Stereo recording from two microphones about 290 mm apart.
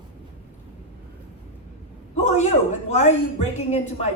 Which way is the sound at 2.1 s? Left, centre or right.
Left.